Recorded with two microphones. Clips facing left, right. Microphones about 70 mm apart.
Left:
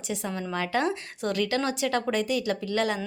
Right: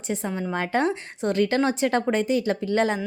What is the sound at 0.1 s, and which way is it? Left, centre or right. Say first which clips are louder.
A woman's voice: right 4 dB; right.